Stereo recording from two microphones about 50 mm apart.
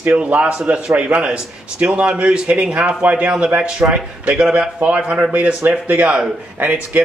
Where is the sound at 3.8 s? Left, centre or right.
Right.